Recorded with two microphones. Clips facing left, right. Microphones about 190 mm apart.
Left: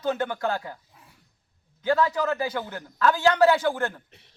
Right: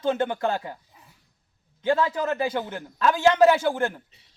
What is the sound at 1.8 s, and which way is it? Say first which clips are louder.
A man's voice: even; 25° right (ahead or behind).